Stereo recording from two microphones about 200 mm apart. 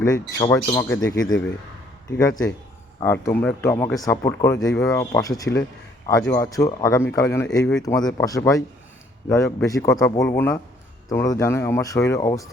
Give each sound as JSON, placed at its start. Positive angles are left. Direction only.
{"t": 0.0, "sound": "speech", "side_deg": 15}